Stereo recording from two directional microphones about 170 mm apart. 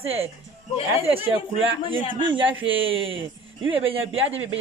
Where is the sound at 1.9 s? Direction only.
30° right (ahead or behind).